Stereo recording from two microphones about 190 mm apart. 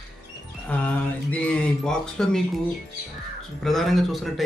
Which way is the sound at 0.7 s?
10° left (ahead or behind).